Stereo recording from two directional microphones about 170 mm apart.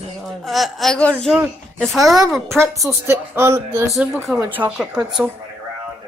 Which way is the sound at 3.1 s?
15° right (ahead or behind).